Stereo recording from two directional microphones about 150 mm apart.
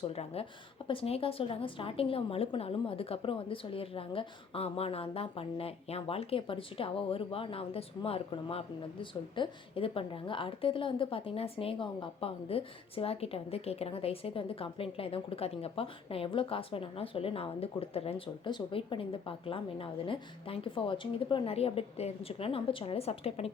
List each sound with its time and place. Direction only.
0.1 s a woman's voice: 45° left (ahead or behind)